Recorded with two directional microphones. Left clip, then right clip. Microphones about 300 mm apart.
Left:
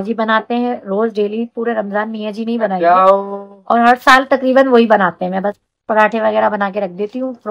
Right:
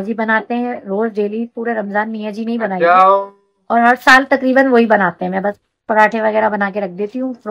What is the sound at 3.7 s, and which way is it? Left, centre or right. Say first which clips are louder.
Speech: left 1 dB; centre.